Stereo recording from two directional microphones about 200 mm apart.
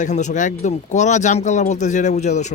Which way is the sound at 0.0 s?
35° left (ahead or behind).